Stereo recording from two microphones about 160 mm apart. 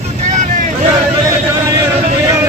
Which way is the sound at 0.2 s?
45° right (ahead or behind).